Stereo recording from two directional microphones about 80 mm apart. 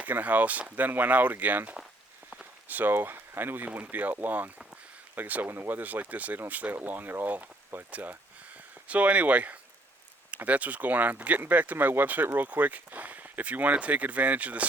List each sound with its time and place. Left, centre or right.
0.0 s speech: centre